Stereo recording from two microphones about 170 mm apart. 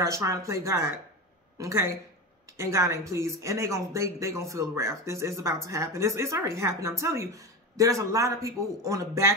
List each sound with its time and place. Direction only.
0.0 s speech: 15° right (ahead or behind)